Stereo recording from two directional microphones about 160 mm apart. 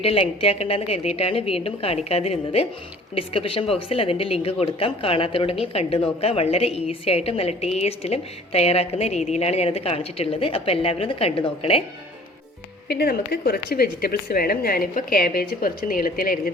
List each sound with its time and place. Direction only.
0.0 s a woman's voice: 35° left (ahead or behind)
12.9 s a woman's voice: 85° left; by 16.4 s 60° left (ahead or behind)